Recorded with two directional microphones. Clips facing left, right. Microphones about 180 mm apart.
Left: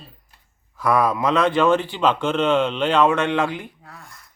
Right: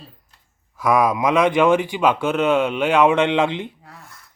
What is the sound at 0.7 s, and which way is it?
Speech, 10° right (ahead or behind).